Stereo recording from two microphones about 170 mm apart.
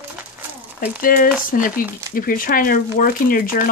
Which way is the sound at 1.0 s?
55° left (ahead or behind).